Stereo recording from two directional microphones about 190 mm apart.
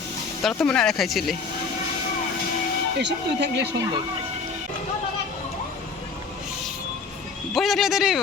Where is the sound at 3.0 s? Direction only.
65° right (ahead or behind).